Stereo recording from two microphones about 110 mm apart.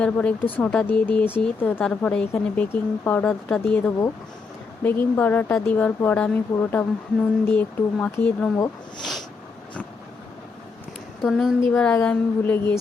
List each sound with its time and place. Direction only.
0.0 s speech: 10° left (ahead or behind)
1.4 s speech: 5° left (ahead or behind)
9.0 s a sound: centre (ahead or behind)
11.2 s speech: centre (ahead or behind)